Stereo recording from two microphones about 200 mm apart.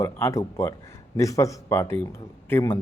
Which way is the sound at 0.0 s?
15° left (ahead or behind).